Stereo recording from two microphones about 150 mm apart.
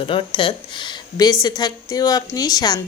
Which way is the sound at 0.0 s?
35° left (ahead or behind).